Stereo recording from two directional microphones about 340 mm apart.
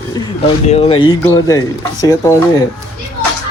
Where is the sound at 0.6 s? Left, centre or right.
Centre.